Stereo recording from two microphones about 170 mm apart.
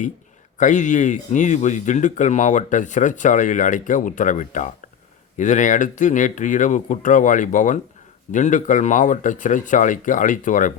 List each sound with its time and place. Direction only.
0.6 s speech: 45° left (ahead or behind)